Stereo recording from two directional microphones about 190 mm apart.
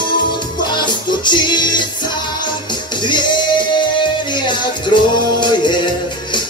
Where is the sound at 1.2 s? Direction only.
25° left (ahead or behind).